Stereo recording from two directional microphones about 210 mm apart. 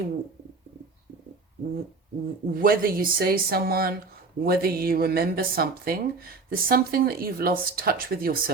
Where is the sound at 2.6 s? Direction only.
45° right (ahead or behind).